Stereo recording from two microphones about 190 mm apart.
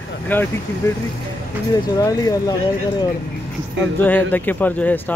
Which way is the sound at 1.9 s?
20° left (ahead or behind).